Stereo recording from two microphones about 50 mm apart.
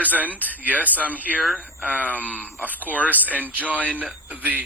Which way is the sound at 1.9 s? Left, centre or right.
Left.